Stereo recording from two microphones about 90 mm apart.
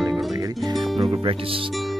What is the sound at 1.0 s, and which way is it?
Speech, 90° right.